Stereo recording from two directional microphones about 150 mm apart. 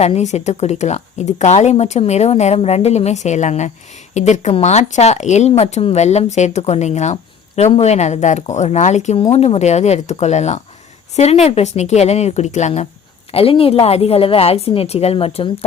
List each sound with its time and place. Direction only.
0.0 s speech: 45° left (ahead or behind)
13.3 s a woman's voice: 40° left (ahead or behind)